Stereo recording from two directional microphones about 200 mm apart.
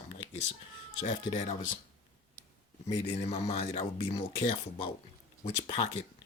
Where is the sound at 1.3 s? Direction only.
35° left (ahead or behind).